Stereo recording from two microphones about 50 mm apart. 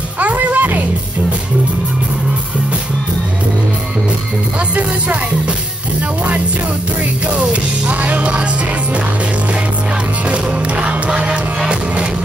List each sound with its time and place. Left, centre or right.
0.2 s music: right
7.9 s music: right
10.3 s music: right